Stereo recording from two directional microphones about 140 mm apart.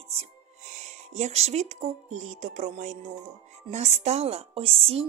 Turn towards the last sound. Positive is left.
turn(degrees=-45)  # may be behind; listen again after turning